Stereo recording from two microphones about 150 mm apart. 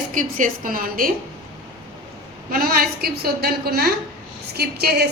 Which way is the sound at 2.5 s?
75° right (ahead or behind).